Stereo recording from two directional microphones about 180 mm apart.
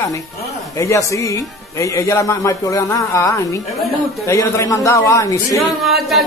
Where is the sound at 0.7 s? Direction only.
15° left (ahead or behind).